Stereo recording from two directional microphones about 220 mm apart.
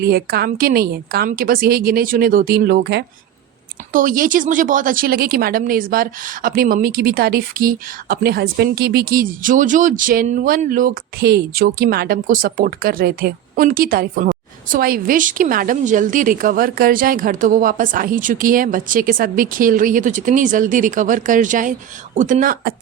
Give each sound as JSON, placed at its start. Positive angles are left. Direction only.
{"t": 0.0, "sound": "a woman's voice", "side_deg": -45}
{"t": 3.9, "sound": "speech", "side_deg": -40}